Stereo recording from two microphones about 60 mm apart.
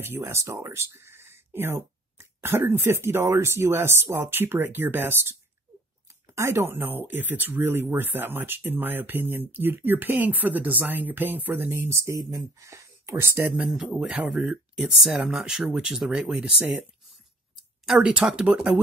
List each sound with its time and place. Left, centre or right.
0.0 s speech: right
6.0 s speech: right
11.9 s speech: right
13.9 s speech: centre
14.4 s speech: centre
17.9 s speech: right